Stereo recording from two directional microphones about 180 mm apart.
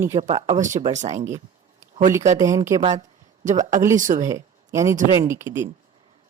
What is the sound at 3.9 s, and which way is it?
Speech, 45° right (ahead or behind).